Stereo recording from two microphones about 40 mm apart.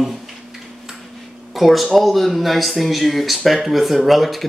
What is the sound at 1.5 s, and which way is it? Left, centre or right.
Speech, centre.